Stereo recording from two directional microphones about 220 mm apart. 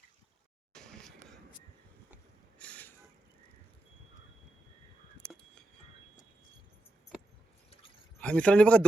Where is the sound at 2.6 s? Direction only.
5° left (ahead or behind).